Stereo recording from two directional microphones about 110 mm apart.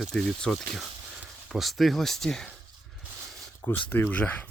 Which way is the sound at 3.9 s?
15° left (ahead or behind).